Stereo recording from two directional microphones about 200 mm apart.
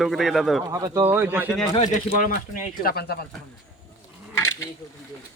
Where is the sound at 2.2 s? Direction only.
45° left (ahead or behind).